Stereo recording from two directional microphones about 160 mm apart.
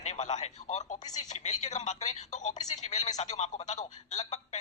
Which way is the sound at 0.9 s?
25° left (ahead or behind).